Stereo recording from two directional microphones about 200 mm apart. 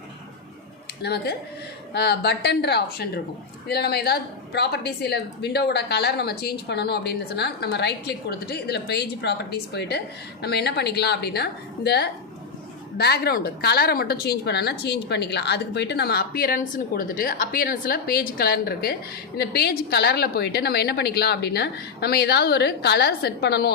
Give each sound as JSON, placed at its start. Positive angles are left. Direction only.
{"t": 1.0, "sound": "a woman's voice", "side_deg": 55}